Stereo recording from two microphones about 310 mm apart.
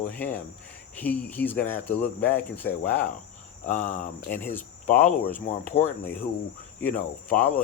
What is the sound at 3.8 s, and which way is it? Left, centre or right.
Speech, left.